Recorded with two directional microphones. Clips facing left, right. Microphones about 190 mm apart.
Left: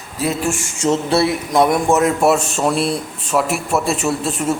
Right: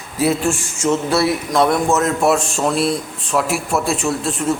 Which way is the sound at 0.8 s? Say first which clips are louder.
Left 1 dB; 25° left (ahead or behind).